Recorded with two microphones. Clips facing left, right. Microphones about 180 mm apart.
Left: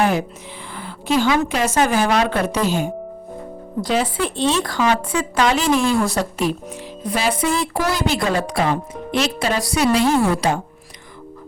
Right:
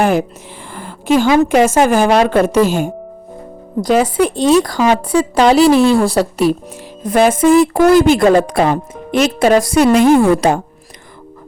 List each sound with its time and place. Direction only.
0.0 s a woman's voice: 45° right (ahead or behind)
7.0 s a woman's voice: 50° right (ahead or behind)